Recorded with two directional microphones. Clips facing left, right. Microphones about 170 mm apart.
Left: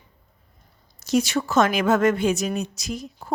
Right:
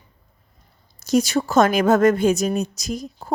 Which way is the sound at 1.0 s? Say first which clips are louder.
Right 3 dB; 40° right (ahead or behind).